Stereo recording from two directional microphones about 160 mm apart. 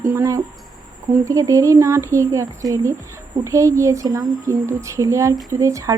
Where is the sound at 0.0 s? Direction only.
15° right (ahead or behind).